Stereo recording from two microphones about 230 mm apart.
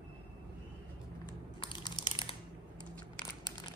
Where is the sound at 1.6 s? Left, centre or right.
Centre.